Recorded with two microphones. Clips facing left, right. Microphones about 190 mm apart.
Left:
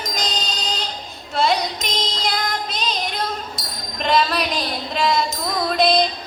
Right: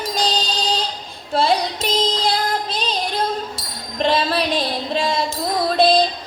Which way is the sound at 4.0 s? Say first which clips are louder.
Right 1 dB; 30° right (ahead or behind).